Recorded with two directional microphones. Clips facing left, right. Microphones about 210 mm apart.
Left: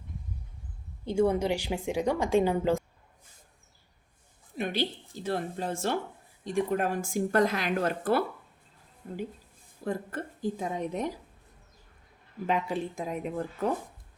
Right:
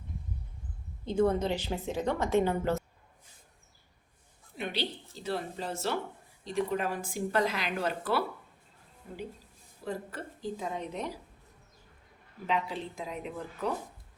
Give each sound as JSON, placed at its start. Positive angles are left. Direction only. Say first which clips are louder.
{"t": 1.0, "sound": "a woman's voice", "louder": "left 2 dB", "side_deg": 10}
{"t": 4.5, "sound": "speech", "louder": "left 4 dB", "side_deg": 50}
{"t": 12.5, "sound": "speech", "louder": "left 3 dB", "side_deg": 50}